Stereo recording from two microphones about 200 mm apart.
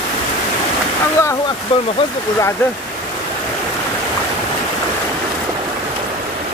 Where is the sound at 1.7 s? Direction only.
25° left (ahead or behind).